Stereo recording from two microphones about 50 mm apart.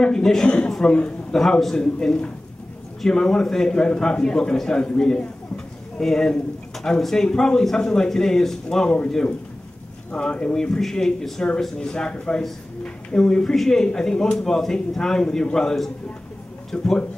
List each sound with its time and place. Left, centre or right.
0.0 s speech: centre
1.4 s speech: centre
10.1 s speech: centre
16.7 s a man's voice: centre